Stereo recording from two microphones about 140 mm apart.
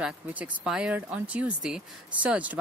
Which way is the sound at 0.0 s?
10° right (ahead or behind).